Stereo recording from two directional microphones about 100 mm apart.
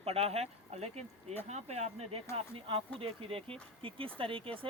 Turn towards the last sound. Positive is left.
turn(degrees=-65)  # may be behind; listen again after turning